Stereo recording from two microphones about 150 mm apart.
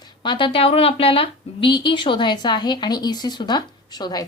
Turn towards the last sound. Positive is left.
turn(degrees=25)  # may be behind; listen again after turning